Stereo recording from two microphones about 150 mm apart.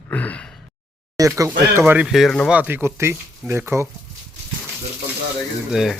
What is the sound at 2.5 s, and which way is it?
Speech, 10° right (ahead or behind).